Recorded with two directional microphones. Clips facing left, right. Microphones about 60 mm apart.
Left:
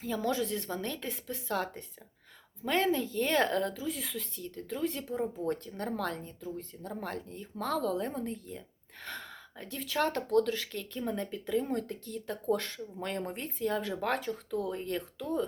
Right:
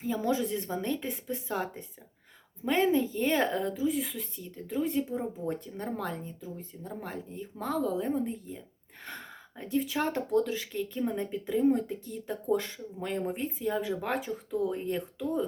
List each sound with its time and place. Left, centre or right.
0.0 s speech: centre